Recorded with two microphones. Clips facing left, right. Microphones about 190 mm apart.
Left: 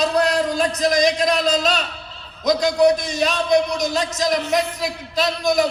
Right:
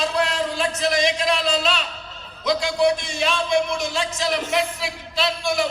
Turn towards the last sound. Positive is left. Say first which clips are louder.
# left 4 dB
turn(degrees=40)  # may be behind; listen again after turning